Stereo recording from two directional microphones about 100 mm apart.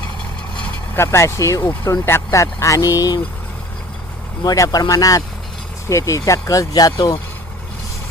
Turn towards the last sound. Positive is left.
turn(degrees=40)  # may be behind; listen again after turning